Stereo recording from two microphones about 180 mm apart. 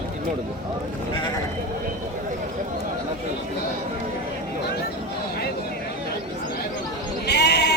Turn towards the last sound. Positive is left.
turn(degrees=70)  # may be behind; listen again after turning